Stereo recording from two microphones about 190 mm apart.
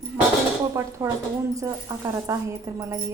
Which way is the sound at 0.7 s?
15° right (ahead or behind).